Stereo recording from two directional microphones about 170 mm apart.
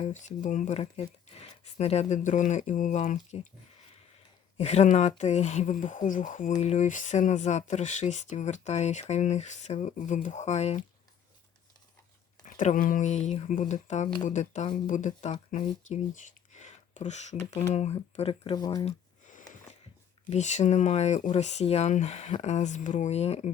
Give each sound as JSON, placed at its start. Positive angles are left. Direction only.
{"t": 0.0, "sound": "speech", "side_deg": 45}
{"t": 4.5, "sound": "speech", "side_deg": 40}
{"t": 12.5, "sound": "speech", "side_deg": 50}
{"t": 15.9, "sound": "a sound", "side_deg": 45}
{"t": 17.4, "sound": "speech", "side_deg": 40}
{"t": 20.3, "sound": "speech", "side_deg": 45}